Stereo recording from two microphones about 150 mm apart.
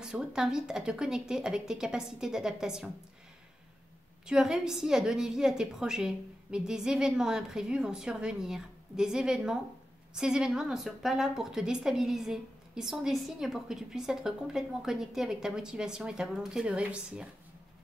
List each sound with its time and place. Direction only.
0.0 s a woman's voice: 5° right (ahead or behind)
4.3 s a woman's voice: 5° right (ahead or behind)